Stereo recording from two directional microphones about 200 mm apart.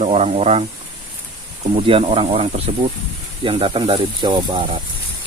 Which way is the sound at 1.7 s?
30° right (ahead or behind).